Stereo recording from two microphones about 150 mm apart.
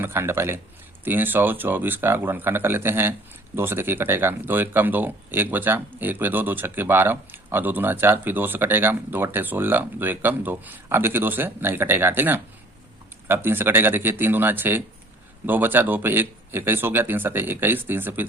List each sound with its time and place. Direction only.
0.0 s speech: 15° right (ahead or behind)